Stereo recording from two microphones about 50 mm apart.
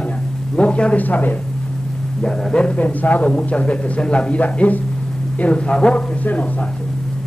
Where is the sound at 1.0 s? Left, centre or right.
Left.